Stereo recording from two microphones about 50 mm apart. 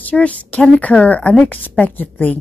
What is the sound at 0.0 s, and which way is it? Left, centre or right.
A woman's voice, left.